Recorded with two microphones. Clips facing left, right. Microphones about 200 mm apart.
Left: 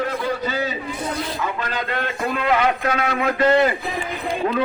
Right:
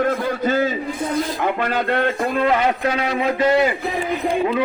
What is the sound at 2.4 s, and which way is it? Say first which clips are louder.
Speech: right 1 dB; 35° right (ahead or behind).